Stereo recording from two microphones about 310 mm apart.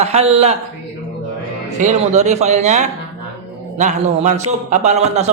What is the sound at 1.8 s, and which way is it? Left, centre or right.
A man's voice, right.